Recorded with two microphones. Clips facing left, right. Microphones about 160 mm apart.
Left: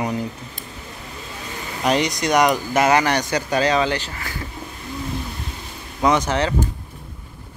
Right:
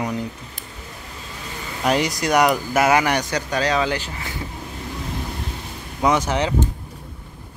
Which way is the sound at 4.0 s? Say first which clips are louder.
Even; 15° right (ahead or behind).